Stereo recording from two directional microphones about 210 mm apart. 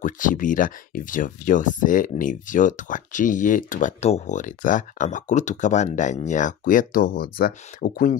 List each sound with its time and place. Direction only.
0.0 s speech: 40° left (ahead or behind)